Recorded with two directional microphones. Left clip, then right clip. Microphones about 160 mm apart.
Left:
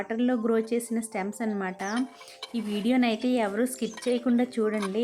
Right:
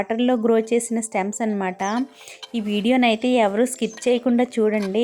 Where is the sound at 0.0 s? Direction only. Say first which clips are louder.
Right 7 dB; 40° right (ahead or behind).